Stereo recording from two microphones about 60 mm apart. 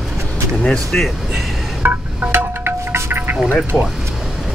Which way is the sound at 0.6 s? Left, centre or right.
Centre.